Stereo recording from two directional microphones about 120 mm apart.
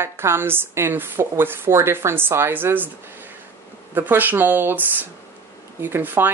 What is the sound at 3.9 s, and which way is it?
Speech, 15° right (ahead or behind).